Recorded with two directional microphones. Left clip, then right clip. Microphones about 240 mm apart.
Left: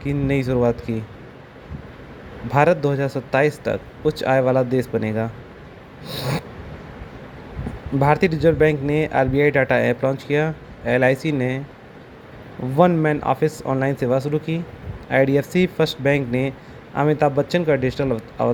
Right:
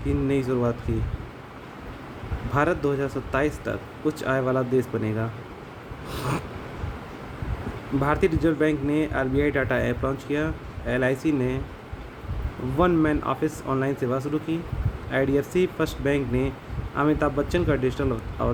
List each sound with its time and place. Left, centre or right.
0.3 s speech: left
2.5 s speech: left
6.1 s snort: centre
8.0 s speech: left
12.8 s speech: left